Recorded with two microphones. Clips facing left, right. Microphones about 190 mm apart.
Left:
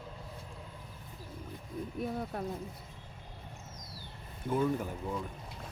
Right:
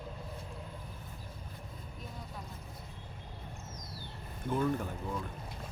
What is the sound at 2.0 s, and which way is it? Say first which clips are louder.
Speech: left 14 dB; 65° left (ahead or behind).